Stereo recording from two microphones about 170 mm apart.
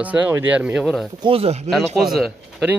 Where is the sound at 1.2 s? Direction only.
35° right (ahead or behind).